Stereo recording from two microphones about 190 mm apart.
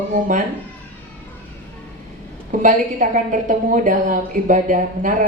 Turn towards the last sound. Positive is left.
turn(degrees=-45)  # may be behind; listen again after turning